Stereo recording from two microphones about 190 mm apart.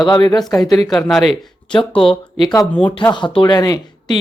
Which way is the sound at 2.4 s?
20° left (ahead or behind).